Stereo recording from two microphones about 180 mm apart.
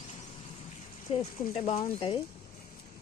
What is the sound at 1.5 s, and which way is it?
Speech, 35° left (ahead or behind).